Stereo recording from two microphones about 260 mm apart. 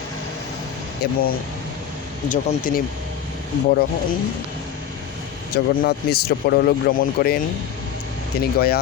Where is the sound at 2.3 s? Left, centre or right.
Left.